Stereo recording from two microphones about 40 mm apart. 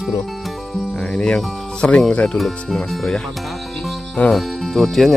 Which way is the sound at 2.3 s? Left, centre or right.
Centre.